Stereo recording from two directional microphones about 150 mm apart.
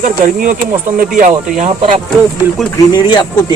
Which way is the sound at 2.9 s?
30° left (ahead or behind).